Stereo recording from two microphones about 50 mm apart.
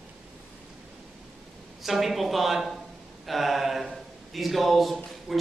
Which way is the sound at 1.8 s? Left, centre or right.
Centre.